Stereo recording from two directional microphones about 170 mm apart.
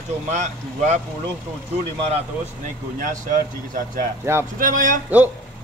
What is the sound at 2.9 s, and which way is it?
Speech, 45° right (ahead or behind).